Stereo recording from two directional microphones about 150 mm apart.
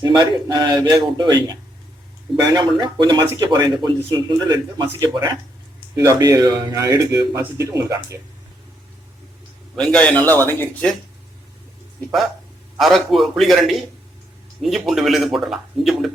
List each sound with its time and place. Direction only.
0.2 s speech: 30° right (ahead or behind)
9.7 s a man's voice: 5° left (ahead or behind)
12.8 s speech: centre (ahead or behind)